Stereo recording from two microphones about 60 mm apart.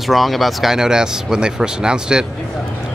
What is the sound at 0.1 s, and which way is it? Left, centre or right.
Speech, centre.